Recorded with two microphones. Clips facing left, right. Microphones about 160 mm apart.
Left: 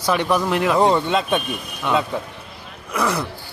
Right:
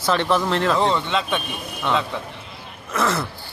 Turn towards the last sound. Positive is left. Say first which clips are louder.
# even
turn(degrees=15)  # may be behind; listen again after turning